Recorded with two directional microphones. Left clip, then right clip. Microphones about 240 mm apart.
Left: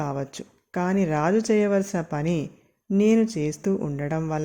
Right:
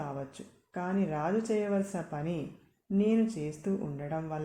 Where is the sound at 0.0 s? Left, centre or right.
Left.